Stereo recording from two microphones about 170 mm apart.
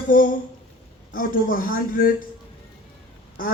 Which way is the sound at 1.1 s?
55° left (ahead or behind).